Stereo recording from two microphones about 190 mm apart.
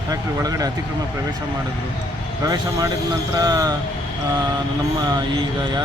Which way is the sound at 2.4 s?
20° right (ahead or behind).